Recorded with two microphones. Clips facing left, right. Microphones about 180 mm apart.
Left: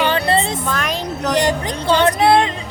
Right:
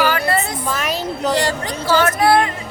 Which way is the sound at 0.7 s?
5° right (ahead or behind).